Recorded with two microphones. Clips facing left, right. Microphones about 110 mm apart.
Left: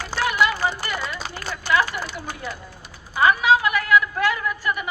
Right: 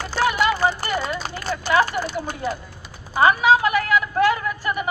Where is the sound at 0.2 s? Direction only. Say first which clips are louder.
Right 2 dB; 35° right (ahead or behind).